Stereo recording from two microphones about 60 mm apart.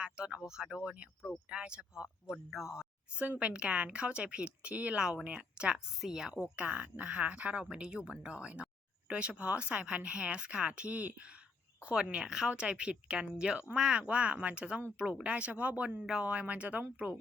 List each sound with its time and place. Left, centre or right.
0.0 s speech: centre
3.2 s speech: right